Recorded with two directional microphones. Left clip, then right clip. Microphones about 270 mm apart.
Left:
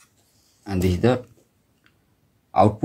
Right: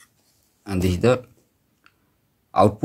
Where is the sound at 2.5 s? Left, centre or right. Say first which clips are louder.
Even; centre.